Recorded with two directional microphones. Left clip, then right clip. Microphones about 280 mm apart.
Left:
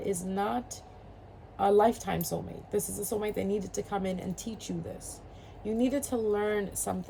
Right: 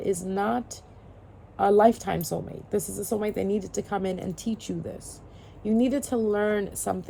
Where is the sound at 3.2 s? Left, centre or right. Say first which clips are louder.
Right 3 dB; right.